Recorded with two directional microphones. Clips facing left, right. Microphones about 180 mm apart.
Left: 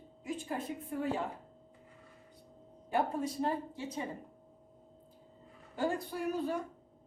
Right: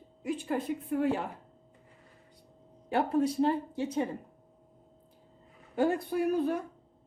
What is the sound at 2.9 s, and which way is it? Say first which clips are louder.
Speech: right 5 dB; 80° right.